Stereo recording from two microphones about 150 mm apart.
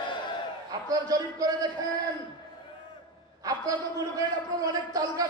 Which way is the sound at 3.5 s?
25° right (ahead or behind).